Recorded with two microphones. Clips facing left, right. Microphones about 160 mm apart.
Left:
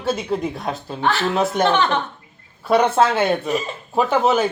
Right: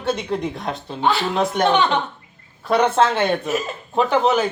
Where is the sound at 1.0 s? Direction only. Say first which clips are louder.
Even; 15° right (ahead or behind).